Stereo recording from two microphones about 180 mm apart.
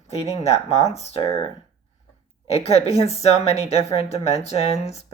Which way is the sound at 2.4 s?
35° left (ahead or behind).